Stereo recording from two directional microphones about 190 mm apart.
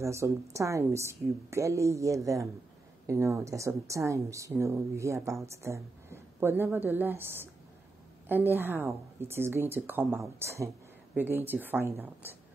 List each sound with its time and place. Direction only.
0.0 s a woman's voice: 15° right (ahead or behind)